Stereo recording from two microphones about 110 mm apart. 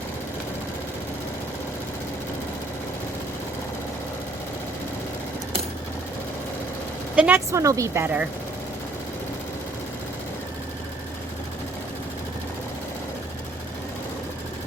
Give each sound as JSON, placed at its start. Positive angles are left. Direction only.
{"t": 7.2, "sound": "speech", "side_deg": -15}
{"t": 7.6, "sound": "a woman's voice", "side_deg": -30}
{"t": 8.0, "sound": "speech", "side_deg": -15}